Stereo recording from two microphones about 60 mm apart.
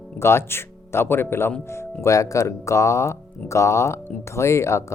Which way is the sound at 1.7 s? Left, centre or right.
Left.